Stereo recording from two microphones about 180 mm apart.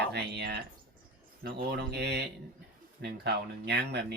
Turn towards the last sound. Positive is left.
turn(degrees=-70)  # may be behind; listen again after turning